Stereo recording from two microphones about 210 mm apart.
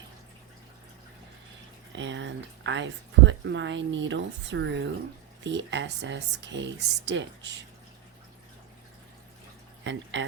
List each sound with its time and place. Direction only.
1.9 s speech: 60° right (ahead or behind)
9.8 s speech: 60° right (ahead or behind)